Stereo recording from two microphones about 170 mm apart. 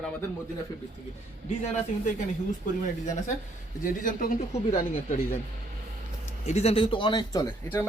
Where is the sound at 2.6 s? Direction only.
50° left (ahead or behind).